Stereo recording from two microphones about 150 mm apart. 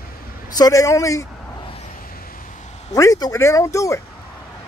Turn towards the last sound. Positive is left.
turn(degrees=20)  # may be behind; listen again after turning